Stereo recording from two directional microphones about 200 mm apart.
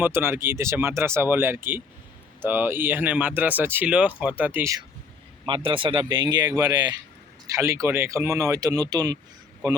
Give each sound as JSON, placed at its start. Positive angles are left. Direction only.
{"t": 0.0, "sound": "speech", "side_deg": -10}